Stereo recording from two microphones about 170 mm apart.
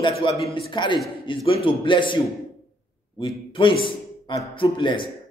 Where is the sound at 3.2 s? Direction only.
30° left (ahead or behind).